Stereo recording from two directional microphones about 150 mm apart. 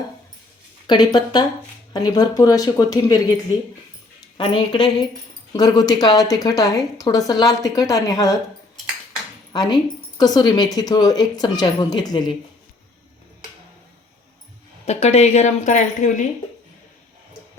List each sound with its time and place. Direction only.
0.9 s a woman's voice: 30° left (ahead or behind)
4.4 s a woman's voice: 35° left (ahead or behind)
9.5 s a woman's voice: 30° left (ahead or behind)
14.8 s speech: 45° left (ahead or behind)